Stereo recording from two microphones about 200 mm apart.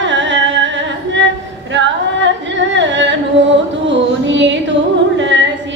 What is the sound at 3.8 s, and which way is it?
Music, 65° right (ahead or behind).